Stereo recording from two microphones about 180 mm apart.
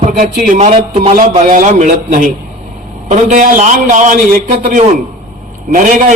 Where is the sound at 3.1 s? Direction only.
45° right (ahead or behind).